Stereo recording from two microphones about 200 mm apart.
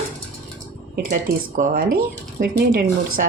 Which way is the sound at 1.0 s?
45° right (ahead or behind).